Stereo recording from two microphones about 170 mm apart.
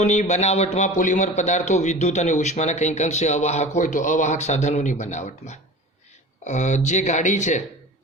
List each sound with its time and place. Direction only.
0.0 s a man's voice: 45° left (ahead or behind)